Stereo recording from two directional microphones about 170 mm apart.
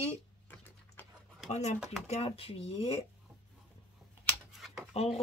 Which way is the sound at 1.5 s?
40° left (ahead or behind).